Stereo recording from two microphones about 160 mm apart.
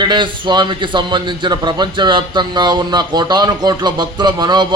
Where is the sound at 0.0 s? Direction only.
30° right (ahead or behind).